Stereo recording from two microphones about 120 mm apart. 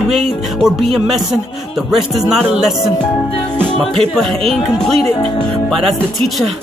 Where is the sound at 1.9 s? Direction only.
Centre (ahead or behind).